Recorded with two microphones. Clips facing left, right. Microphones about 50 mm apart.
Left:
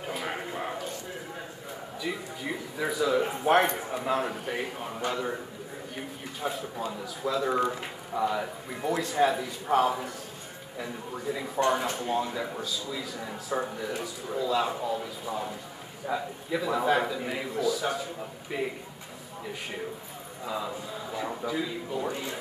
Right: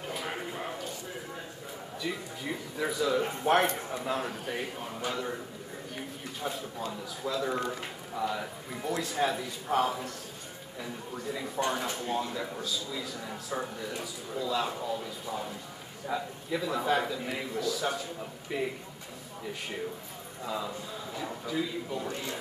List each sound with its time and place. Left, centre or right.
0.0 s a sound: centre
2.0 s speech: centre
6.5 s a man's voice: centre
13.2 s speech: centre
20.4 s speech: centre
22.0 s speech: centre